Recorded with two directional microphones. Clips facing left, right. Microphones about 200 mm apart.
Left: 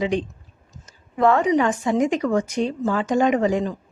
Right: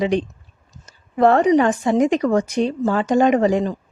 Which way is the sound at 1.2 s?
35° right (ahead or behind).